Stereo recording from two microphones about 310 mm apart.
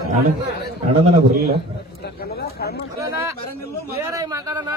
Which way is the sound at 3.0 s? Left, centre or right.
Centre.